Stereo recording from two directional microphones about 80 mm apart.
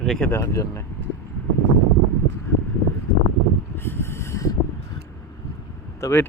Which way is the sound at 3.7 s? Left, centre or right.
Left.